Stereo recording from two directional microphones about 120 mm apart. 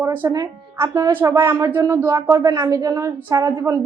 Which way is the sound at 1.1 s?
20° right (ahead or behind).